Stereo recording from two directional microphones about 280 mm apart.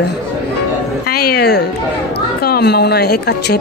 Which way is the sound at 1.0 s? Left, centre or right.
Left.